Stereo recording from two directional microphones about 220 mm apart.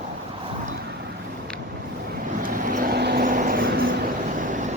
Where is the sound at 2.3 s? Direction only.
40° right (ahead or behind).